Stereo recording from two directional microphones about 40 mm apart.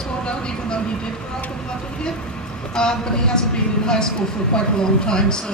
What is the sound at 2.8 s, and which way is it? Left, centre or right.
A woman's voice, centre.